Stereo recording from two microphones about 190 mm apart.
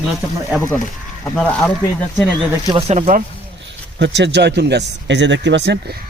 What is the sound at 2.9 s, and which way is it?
Speech, 40° right (ahead or behind).